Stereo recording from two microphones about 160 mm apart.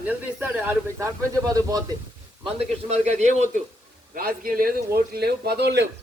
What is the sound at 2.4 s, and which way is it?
A man's voice, 40° right (ahead or behind).